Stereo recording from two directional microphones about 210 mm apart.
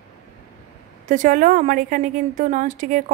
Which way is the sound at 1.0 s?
35° right (ahead or behind).